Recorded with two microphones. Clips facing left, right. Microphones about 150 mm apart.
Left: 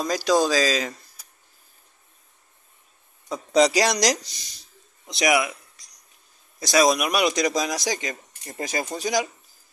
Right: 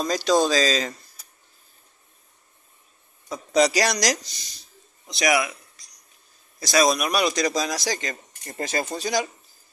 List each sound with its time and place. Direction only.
0.0 s speech: 10° left (ahead or behind)
3.3 s speech: 20° left (ahead or behind)
6.6 s speech: 15° left (ahead or behind)